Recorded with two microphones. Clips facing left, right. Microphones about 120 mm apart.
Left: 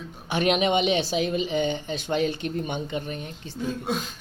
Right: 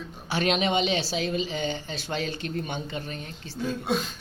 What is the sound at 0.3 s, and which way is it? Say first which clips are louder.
A woman's voice: left 3 dB; 15° left (ahead or behind).